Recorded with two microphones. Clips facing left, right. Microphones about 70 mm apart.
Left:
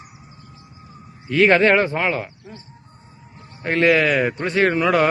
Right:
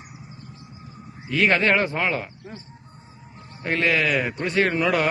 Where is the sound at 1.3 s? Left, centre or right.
Left.